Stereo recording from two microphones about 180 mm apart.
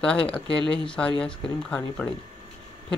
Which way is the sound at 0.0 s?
5° left (ahead or behind).